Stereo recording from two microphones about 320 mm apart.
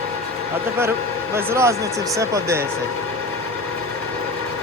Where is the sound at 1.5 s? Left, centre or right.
Centre.